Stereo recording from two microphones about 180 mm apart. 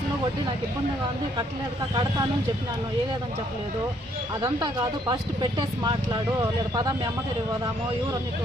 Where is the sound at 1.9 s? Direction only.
20° right (ahead or behind).